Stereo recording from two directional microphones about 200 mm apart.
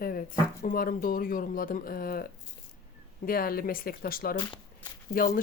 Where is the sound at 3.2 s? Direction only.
45° left (ahead or behind).